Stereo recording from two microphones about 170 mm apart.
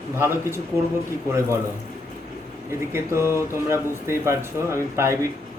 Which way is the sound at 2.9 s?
15° right (ahead or behind).